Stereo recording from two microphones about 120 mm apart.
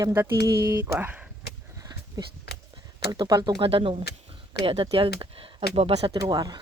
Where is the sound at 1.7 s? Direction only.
30° right (ahead or behind).